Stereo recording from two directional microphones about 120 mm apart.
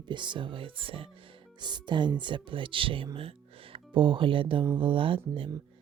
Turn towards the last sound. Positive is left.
turn(degrees=-45)  # may be behind; listen again after turning